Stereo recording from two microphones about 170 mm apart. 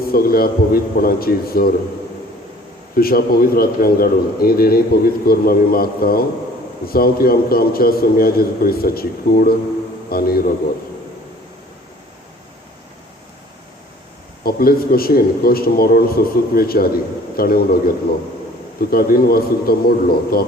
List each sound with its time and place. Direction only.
0.0 s a man's voice: 60° left (ahead or behind)
2.9 s a man's voice: 60° left (ahead or behind)
14.4 s a man's voice: 60° left (ahead or behind)